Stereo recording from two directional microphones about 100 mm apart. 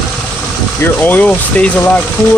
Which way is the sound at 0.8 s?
20° left (ahead or behind).